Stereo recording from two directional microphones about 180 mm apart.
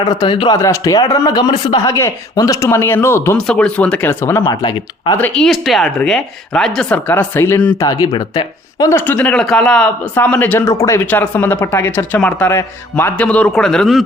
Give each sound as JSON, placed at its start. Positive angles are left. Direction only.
{"t": 0.0, "sound": "speech", "side_deg": 25}
{"t": 4.4, "sound": "speech", "side_deg": 25}
{"t": 5.1, "sound": "speech", "side_deg": 5}